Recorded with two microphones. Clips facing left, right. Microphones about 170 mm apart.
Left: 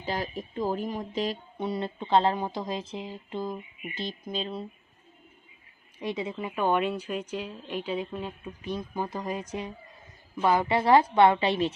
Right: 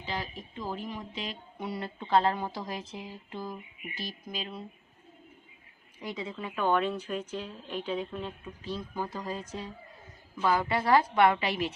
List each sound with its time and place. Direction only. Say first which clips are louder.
0.0 s speech: left 5 dB; 45° left (ahead or behind)
1.5 s a woman's voice: left 5 dB; 25° left (ahead or behind)
6.0 s a woman's voice: left 5 dB; 25° left (ahead or behind)